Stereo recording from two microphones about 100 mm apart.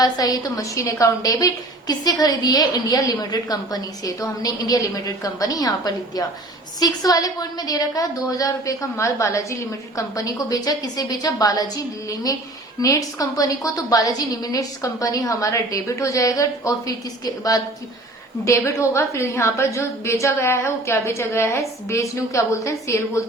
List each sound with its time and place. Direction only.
0.0 s a woman's voice: 40° left (ahead or behind)